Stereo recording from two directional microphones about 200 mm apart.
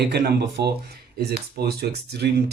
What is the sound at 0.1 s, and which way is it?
Speech, 55° right (ahead or behind).